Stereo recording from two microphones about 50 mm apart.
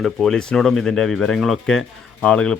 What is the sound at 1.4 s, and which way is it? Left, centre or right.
Speech, centre.